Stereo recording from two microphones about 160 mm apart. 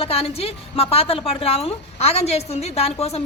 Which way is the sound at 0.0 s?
40° left (ahead or behind).